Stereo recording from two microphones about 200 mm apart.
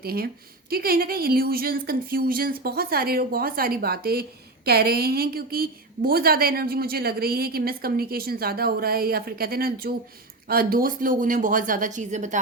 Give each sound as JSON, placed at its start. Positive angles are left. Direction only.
{"t": 0.0, "sound": "a woman's voice", "side_deg": -50}